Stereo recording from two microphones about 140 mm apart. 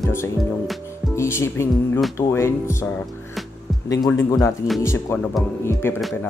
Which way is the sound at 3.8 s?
25° left (ahead or behind).